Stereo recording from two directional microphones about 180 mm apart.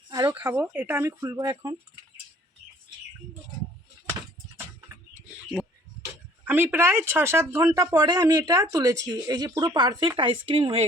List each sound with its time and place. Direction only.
0.1 s speech: 20° right (ahead or behind)
6.5 s speech: 10° right (ahead or behind); by 10.8 s 35° right (ahead or behind)